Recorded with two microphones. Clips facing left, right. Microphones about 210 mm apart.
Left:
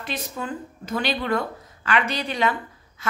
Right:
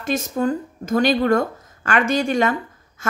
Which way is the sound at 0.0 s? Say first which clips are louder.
Right 10 dB; 45° right (ahead or behind).